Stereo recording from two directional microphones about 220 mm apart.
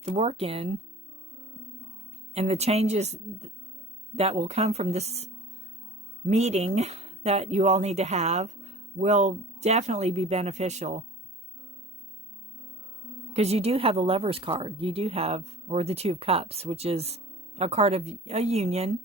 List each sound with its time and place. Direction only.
0.0 s speech: 25° right (ahead or behind)
2.3 s speech: 30° right (ahead or behind)
13.3 s speech: 30° right (ahead or behind)